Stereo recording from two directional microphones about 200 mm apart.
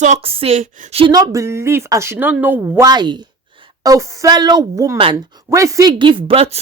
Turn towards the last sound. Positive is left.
turn(degrees=-30)  # may be behind; listen again after turning